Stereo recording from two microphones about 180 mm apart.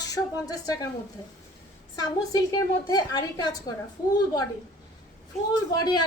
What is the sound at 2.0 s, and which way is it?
A woman's voice, 20° left (ahead or behind).